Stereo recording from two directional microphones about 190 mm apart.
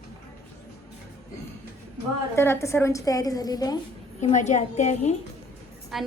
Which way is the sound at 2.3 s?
15° left (ahead or behind).